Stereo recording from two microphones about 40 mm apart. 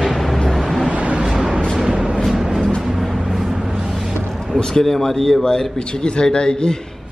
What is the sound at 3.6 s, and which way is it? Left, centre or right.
Vehicle, centre.